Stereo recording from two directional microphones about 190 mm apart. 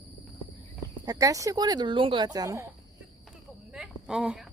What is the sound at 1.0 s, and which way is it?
Speech, 20° right (ahead or behind).